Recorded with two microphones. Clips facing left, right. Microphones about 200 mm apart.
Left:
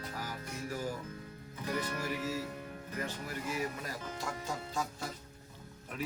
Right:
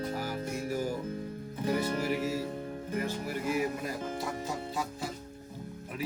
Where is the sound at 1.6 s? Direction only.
25° right (ahead or behind).